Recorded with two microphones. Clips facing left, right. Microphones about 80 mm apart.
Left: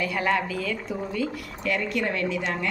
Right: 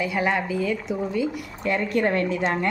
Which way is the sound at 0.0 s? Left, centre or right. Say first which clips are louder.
Right 1 dB; centre.